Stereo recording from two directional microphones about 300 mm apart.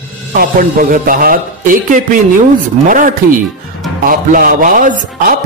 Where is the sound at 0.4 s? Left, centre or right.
Right.